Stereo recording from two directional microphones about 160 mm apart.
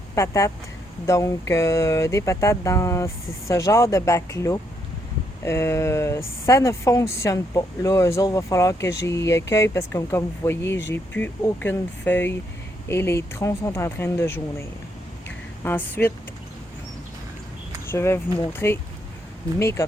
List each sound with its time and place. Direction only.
0.2 s speech: 20° left (ahead or behind)
15.6 s speech: 15° left (ahead or behind)
17.8 s speech: 15° left (ahead or behind)